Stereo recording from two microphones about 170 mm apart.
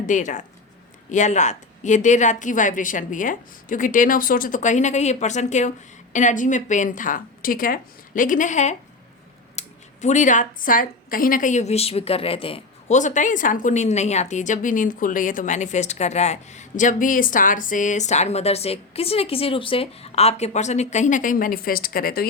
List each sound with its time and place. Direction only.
0.0 s a woman's voice: 45° left (ahead or behind)
13.0 s a woman's voice: 45° left (ahead or behind)